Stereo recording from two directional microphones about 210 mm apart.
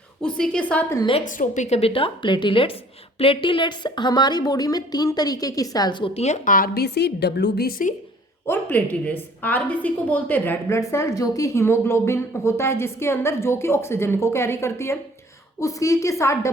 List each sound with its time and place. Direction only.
0.2 s a woman's voice: 5° left (ahead or behind)
1.2 s a woman's voice: 40° left (ahead or behind)
8.4 s a woman's voice: 10° left (ahead or behind)